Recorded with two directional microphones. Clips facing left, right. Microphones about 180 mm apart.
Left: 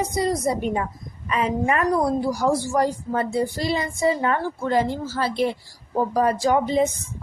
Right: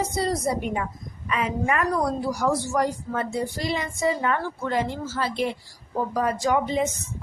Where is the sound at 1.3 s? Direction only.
30° left (ahead or behind).